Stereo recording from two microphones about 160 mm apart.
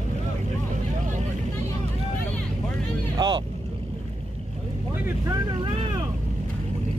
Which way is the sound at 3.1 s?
30° right (ahead or behind).